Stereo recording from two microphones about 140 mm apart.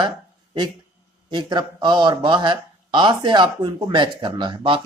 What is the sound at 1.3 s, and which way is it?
Speech, 35° right (ahead or behind).